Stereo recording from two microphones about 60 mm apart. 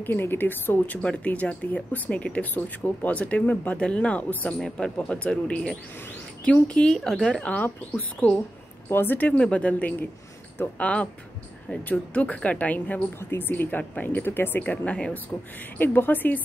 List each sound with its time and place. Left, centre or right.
0.0 s speech: left
1.0 s speech: left
4.7 s speech: centre
8.8 s speech: left
9.3 s speech: left
13.2 s speech: left
14.6 s speech: left
15.8 s speech: left